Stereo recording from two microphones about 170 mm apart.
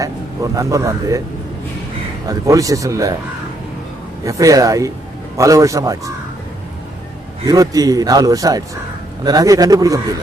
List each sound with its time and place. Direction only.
0.5 s a man's voice: 20° right (ahead or behind)
2.2 s a man's voice: 20° right (ahead or behind)
4.2 s a man's voice: 20° right (ahead or behind)
7.4 s a man's voice: 20° right (ahead or behind)